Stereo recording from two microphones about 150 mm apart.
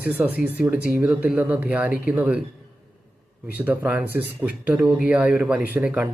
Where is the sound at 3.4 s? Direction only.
10° right (ahead or behind).